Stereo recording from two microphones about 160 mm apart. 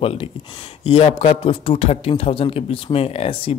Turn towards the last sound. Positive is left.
turn(degrees=35)  # may be behind; listen again after turning